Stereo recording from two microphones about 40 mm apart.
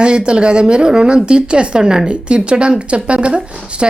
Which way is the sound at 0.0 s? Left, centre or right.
Right.